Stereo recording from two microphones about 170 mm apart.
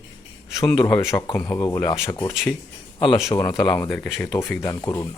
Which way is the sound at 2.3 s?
Centre (ahead or behind).